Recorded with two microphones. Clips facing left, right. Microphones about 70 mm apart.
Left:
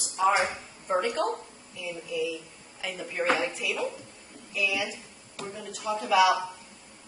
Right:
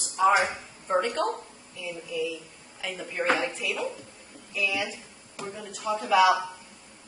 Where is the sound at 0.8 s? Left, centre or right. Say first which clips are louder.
Right 1 dB; centre.